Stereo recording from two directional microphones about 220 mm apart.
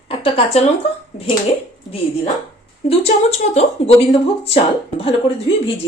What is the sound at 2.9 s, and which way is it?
Speech, 30° left (ahead or behind).